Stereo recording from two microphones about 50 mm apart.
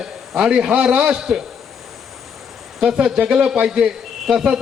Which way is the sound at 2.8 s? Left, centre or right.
Centre.